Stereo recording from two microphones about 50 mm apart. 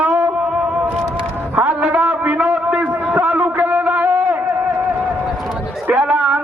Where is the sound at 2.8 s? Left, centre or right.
Right.